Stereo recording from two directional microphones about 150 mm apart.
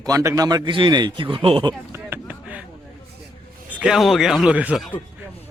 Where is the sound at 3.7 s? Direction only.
5° right (ahead or behind).